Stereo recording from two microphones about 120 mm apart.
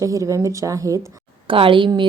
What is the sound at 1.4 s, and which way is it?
Speech, 50° right (ahead or behind).